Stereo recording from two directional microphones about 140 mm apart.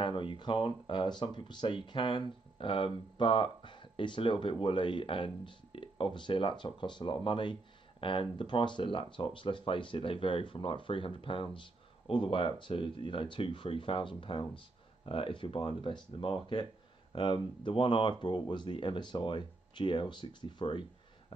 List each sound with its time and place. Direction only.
0.0 s speech: 35° left (ahead or behind)